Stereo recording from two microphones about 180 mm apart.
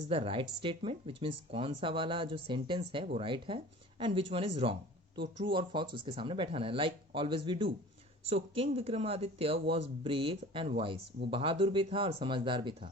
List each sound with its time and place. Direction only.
0.1 s speech: 30° right (ahead or behind)
8.7 s speech: 35° right (ahead or behind)